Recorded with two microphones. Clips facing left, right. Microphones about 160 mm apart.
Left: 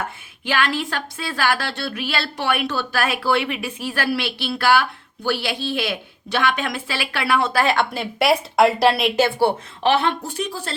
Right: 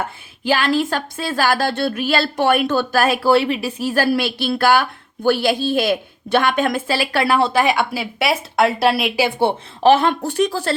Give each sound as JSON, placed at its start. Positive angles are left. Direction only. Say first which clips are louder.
{"t": 0.4, "sound": "a woman's voice", "louder": "right 5 dB", "side_deg": -35}
{"t": 7.5, "sound": "a woman's voice", "louder": "right 2 dB", "side_deg": -15}
{"t": 9.8, "sound": "a woman's voice", "louder": "right 5 dB", "side_deg": -45}
{"t": 10.2, "sound": "speech", "louder": "right 9 dB", "side_deg": -75}